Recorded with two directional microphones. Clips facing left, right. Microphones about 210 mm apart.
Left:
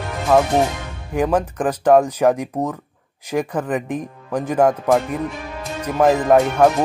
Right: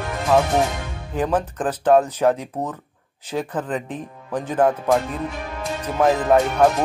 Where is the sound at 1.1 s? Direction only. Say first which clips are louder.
Left 3 dB; 10° left (ahead or behind).